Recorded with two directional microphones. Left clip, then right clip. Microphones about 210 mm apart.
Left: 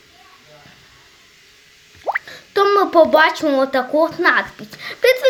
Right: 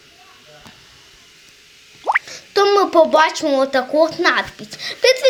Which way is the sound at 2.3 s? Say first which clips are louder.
Left 2 dB; 10° left (ahead or behind).